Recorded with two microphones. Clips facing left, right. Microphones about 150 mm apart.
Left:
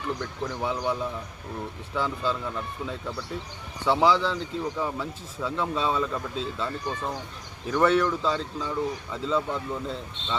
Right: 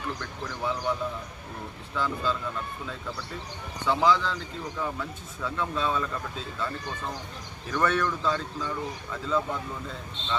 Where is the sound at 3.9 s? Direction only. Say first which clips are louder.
Left 2 dB; 30° left (ahead or behind).